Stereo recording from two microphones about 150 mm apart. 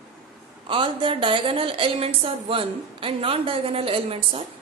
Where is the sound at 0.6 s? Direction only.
35° right (ahead or behind).